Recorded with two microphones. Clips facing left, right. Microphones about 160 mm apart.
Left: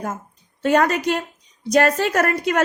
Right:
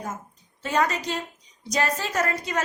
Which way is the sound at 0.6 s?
60° left (ahead or behind).